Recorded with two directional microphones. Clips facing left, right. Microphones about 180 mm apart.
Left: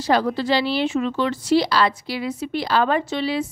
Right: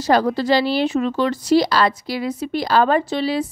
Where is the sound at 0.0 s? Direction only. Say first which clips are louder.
Right 3 dB; 40° right (ahead or behind).